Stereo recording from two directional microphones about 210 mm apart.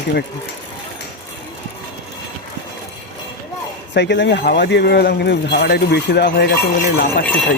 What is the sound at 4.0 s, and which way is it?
Speech, 55° left (ahead or behind).